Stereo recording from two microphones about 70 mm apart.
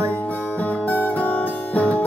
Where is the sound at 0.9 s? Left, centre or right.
Left.